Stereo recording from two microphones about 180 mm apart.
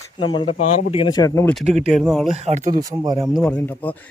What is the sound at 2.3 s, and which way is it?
Speech, 40° right (ahead or behind).